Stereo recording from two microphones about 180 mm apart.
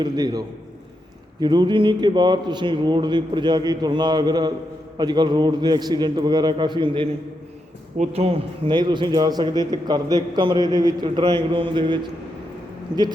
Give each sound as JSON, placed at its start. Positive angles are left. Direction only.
{"t": 0.0, "sound": "a man's voice", "side_deg": -20}